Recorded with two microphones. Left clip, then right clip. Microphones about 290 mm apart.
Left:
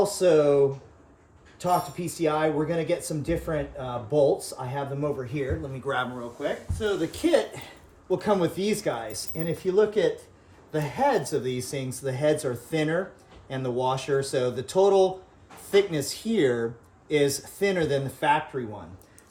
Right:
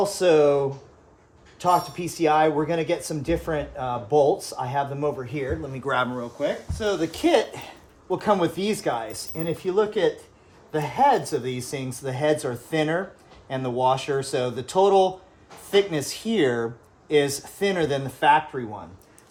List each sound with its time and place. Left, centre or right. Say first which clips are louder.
0.0 s speech: right 2 dB; centre
1.5 s speech: right 4 dB; centre
9.8 s speech: right 1 dB; centre